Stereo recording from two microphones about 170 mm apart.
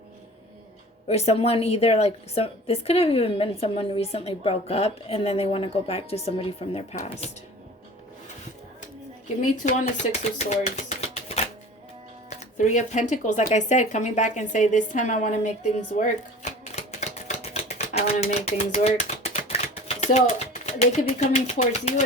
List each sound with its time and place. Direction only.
1.0 s a woman's voice: 40° left (ahead or behind)
9.4 s a woman's voice: 45° left (ahead or behind)
10.8 s a sound: 40° left (ahead or behind)
12.3 s speech: 45° left (ahead or behind)
16.0 s typewriter: 45° left (ahead or behind)
20.0 s a sound: 40° left (ahead or behind)
21.1 s a woman's voice: 40° left (ahead or behind)